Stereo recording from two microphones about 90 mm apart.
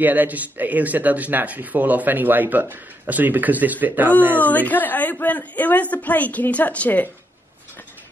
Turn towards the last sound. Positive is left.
turn(degrees=15)  # may be behind; listen again after turning